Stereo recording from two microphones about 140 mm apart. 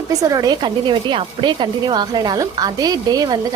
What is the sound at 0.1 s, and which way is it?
Speech, 25° right (ahead or behind).